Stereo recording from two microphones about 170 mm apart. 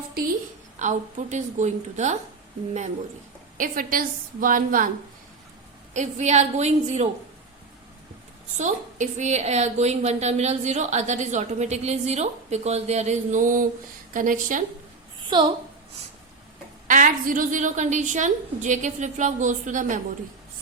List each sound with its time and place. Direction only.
0.8 s a woman's voice: 45° right (ahead or behind)
3.6 s a woman's voice: 55° right (ahead or behind)
5.9 s a woman's voice: 45° right (ahead or behind)
8.5 s a woman's voice: 45° right (ahead or behind)
15.3 s a woman's voice: 25° right (ahead or behind)
16.8 s a woman's voice: 50° right (ahead or behind)